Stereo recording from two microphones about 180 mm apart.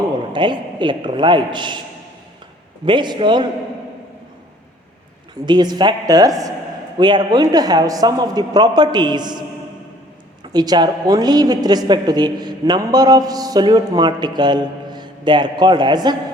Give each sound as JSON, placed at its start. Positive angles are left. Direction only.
{"t": 0.3, "sound": "a woman's voice", "side_deg": -25}
{"t": 2.8, "sound": "a woman's voice", "side_deg": -25}
{"t": 5.5, "sound": "a woman's voice", "side_deg": -25}
{"t": 10.5, "sound": "a woman's voice", "side_deg": -20}